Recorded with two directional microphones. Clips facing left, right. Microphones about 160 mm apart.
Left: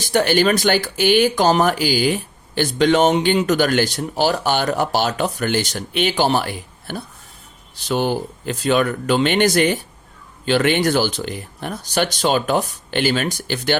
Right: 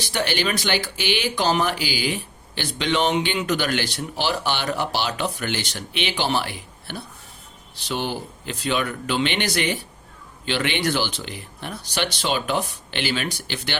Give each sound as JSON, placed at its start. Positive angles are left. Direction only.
{"t": 0.0, "sound": "speech", "side_deg": 45}